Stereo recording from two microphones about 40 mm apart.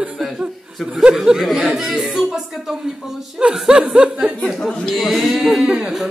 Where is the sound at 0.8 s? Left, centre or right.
Centre.